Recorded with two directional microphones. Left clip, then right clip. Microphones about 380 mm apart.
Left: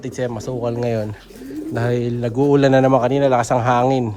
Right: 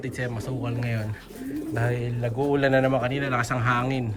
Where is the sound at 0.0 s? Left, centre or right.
Centre.